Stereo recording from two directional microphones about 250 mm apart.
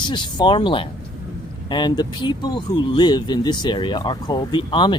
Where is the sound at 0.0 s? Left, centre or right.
Centre.